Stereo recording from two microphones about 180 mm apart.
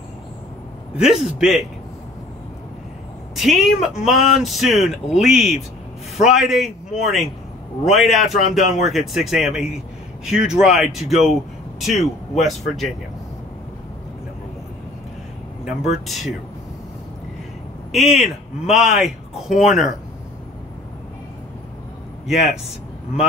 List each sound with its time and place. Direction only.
0.9 s speech: centre (ahead or behind)
3.3 s speech: centre (ahead or behind)
8.5 s speech: 45° left (ahead or behind)
8.8 s speech: centre (ahead or behind)
15.9 s speech: centre (ahead or behind)
17.9 s speech: centre (ahead or behind)
22.2 s a man's voice: centre (ahead or behind)